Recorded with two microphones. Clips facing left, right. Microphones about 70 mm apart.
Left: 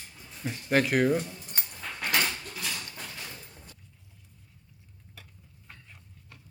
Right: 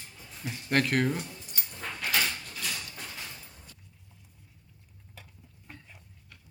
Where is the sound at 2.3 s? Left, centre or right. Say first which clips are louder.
Left 1 dB; centre.